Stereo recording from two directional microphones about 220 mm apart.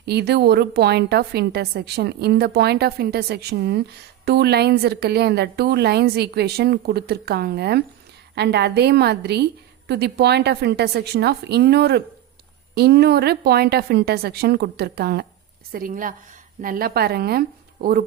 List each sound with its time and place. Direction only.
0.0 s a woman's voice: 50° right (ahead or behind)